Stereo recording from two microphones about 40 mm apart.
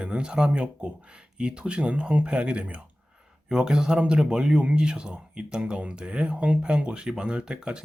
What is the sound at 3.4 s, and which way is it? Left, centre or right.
Speech, centre.